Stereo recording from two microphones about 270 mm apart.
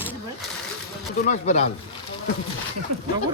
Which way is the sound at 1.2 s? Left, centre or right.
Left.